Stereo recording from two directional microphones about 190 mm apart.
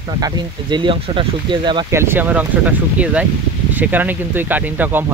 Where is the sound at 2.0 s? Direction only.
10° right (ahead or behind).